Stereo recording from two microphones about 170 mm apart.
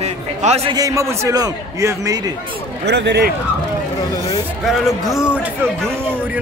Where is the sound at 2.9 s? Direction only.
85° right.